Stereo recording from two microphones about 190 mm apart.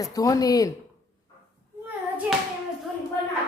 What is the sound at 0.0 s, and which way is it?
Speech, 20° left (ahead or behind).